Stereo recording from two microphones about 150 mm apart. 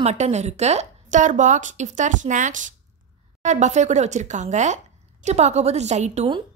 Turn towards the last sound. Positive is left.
turn(degrees=-50)  # may be behind; listen again after turning